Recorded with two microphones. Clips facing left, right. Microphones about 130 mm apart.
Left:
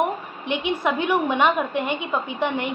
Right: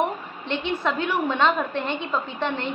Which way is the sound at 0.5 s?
15° left (ahead or behind).